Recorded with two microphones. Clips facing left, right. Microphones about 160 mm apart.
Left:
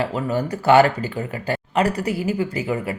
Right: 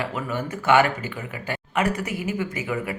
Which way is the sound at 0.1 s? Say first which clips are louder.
Left 5 dB; 35° left (ahead or behind).